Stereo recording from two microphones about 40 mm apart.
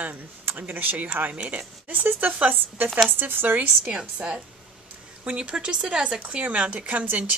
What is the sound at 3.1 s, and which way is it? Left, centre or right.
Speech, right.